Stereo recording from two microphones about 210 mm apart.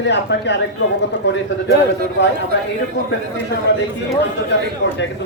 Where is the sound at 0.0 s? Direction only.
55° left (ahead or behind).